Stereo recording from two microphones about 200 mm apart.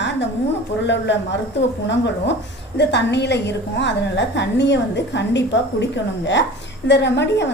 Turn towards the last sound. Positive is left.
turn(degrees=60)  # may be behind; listen again after turning